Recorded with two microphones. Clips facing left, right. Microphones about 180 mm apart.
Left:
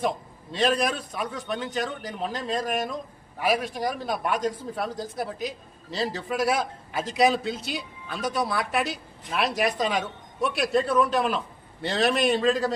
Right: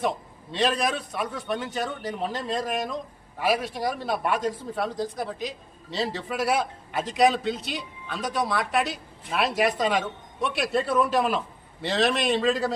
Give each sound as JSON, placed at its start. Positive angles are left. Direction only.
{"t": 0.5, "sound": "a man's voice", "side_deg": 0}